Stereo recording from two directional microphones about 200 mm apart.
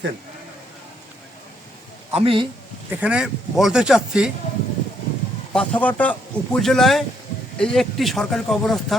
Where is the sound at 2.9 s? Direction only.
5° right (ahead or behind).